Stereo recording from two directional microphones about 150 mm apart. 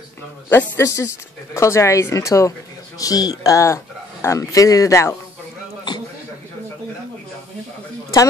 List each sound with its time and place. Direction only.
0.5 s speech: 15° left (ahead or behind)